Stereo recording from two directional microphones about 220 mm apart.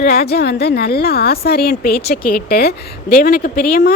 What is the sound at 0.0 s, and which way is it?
A woman's voice, 45° left (ahead or behind).